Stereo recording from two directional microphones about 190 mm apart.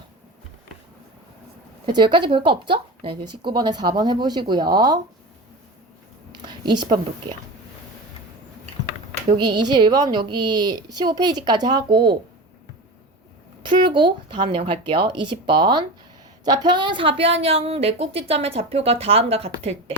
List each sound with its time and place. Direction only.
1.9 s speech: 25° right (ahead or behind)
6.3 s a sound: 25° right (ahead or behind)
6.7 s speech: 25° right (ahead or behind)
9.4 s speech: 25° right (ahead or behind)
13.6 s a woman's voice: 25° right (ahead or behind)